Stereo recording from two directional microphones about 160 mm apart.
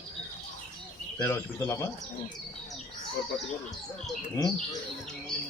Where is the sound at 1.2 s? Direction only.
20° left (ahead or behind).